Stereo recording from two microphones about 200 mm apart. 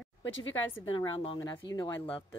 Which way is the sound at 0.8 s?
25° left (ahead or behind).